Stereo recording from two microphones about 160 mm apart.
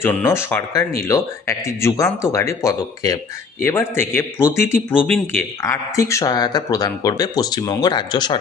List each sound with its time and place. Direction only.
0.0 s a man's voice: 10° left (ahead or behind); by 8.4 s 25° left (ahead or behind)